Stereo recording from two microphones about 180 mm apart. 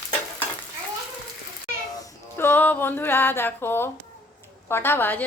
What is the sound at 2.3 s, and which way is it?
A woman's voice, 10° left (ahead or behind).